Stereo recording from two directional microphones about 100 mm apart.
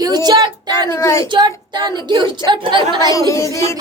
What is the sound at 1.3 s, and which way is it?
Speech, 50° right (ahead or behind).